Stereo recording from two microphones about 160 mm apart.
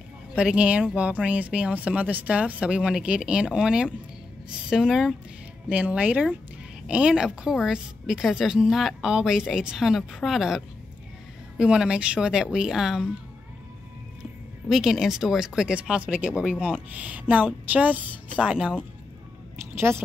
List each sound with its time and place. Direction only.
0.3 s a woman's voice: 5° right (ahead or behind)
14.7 s a woman's voice: centre (ahead or behind)
19.9 s speech: 15° right (ahead or behind)